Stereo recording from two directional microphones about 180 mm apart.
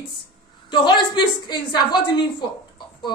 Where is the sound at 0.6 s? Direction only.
25° left (ahead or behind).